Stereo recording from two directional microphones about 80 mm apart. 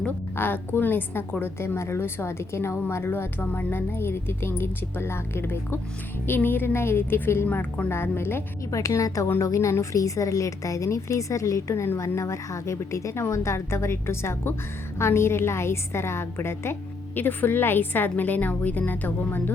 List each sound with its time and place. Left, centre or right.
0.0 s a woman's voice: left
8.7 s a woman's voice: left